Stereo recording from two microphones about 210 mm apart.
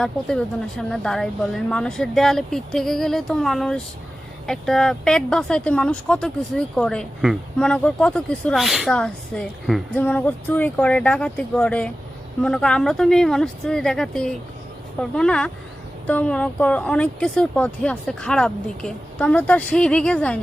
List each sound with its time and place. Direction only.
0.0 s speech: 5° left (ahead or behind)